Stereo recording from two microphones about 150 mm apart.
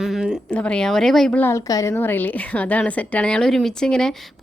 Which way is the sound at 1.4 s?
20° left (ahead or behind).